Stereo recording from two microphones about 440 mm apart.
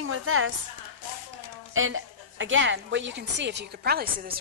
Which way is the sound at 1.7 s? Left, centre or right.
Right.